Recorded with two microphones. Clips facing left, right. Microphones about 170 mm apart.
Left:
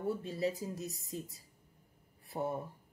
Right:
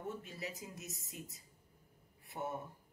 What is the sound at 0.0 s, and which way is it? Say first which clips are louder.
Speech: left 10 dB; 35° left (ahead or behind).